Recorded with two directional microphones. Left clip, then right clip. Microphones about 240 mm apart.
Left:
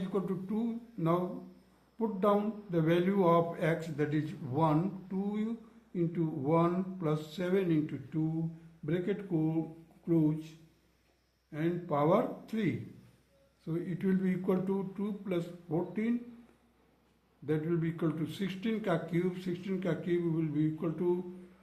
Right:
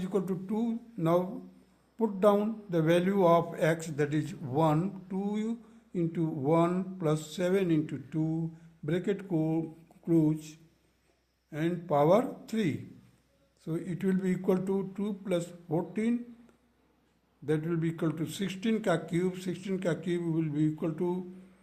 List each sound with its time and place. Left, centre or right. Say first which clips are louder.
0.1 s a man's voice: right 4 dB; right
11.5 s a man's voice: right 4 dB; right
17.4 s a man's voice: right 2 dB; right